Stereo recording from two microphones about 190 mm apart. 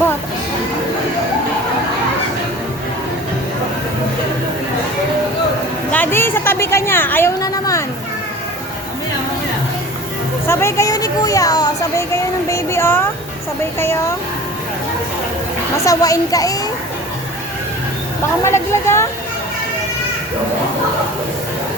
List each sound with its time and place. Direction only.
5.9 s a sound: 10° left (ahead or behind)
10.4 s speech: 15° left (ahead or behind)
12.5 s a sound: 15° left (ahead or behind)
13.7 s a child's voice: 15° left (ahead or behind)
15.8 s a child's voice: 20° left (ahead or behind)
18.4 s a child's voice: 15° left (ahead or behind)